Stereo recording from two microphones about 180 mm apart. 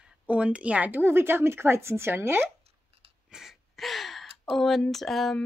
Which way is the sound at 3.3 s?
Centre (ahead or behind).